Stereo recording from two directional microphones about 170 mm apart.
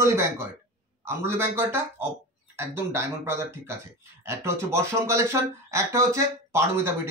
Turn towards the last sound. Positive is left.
turn(degrees=-15)  # may be behind; listen again after turning